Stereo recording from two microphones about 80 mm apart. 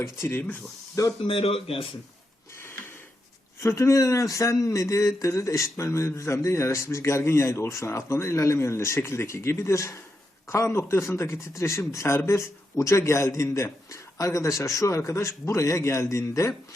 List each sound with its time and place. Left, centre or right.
0.0 s speech: left
1.0 s speech: left
3.6 s speech: left